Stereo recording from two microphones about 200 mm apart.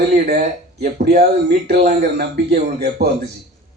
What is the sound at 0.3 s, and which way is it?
Speech, 45° right (ahead or behind).